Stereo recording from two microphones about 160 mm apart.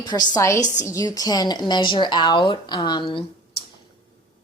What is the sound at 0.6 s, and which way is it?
Speech, 50° left (ahead or behind).